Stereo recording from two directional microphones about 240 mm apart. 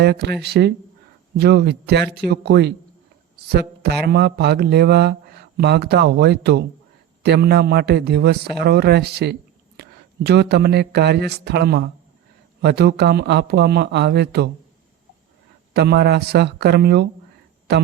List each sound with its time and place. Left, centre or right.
0.0 s a man's voice: right
15.7 s a man's voice: right